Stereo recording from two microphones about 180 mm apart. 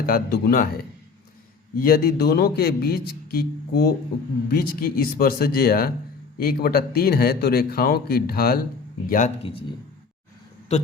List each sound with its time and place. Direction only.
0.0 s speech: 60° left (ahead or behind)
1.8 s a man's voice: 55° left (ahead or behind)
9.4 s speech: 30° left (ahead or behind)